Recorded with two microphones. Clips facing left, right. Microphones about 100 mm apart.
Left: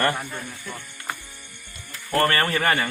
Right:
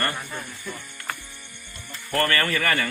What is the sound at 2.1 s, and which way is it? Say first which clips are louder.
Speech: left 2 dB; 30° left (ahead or behind).